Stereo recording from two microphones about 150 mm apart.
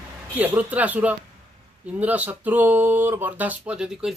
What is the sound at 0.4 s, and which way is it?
A man's voice, 10° right (ahead or behind).